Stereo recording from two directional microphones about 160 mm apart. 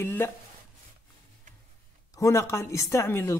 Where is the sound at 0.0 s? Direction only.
15° left (ahead or behind).